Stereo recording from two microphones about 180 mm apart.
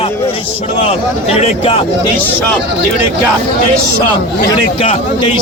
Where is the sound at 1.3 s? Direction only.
30° left (ahead or behind).